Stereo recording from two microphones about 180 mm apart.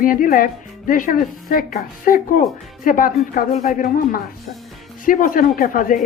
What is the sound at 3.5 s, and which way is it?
A woman's voice, 40° left (ahead or behind).